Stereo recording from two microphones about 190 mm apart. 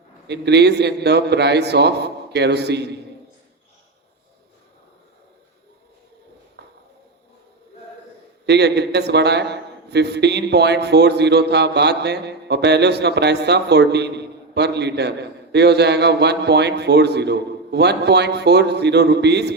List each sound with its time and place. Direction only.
0.3 s a man's voice: 60° right (ahead or behind)
6.6 s a sound: 65° right (ahead or behind)
8.4 s a man's voice: 60° right (ahead or behind)